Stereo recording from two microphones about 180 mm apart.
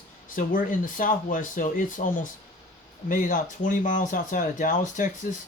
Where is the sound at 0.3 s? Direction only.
50° left (ahead or behind).